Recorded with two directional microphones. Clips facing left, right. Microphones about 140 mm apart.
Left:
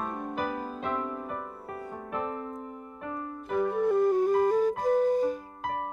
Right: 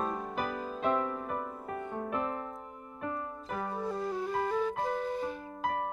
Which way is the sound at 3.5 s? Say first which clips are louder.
Left 10 dB; 60° left (ahead or behind).